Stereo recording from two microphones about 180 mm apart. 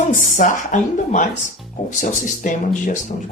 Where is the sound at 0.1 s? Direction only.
45° left (ahead or behind).